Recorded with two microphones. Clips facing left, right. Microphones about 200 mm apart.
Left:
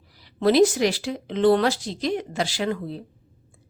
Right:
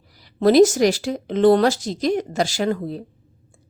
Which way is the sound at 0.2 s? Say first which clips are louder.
Right 4 dB; 45° right (ahead or behind).